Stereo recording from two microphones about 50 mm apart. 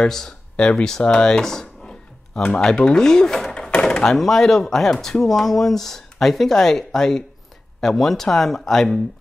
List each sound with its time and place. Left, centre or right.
0.0 s speech: centre
0.6 s speech: centre
1.0 s a sound: centre
2.4 s speech: centre